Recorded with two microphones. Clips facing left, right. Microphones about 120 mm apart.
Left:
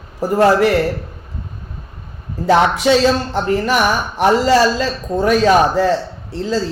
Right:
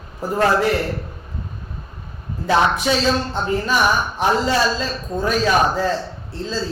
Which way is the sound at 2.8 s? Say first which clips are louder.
Left 6 dB; 75° left (ahead or behind).